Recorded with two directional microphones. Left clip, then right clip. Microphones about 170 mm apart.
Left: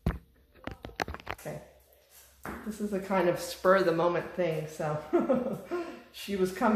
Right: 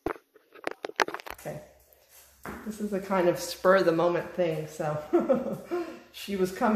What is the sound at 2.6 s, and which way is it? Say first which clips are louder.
Speech: right 2 dB; 25° right (ahead or behind).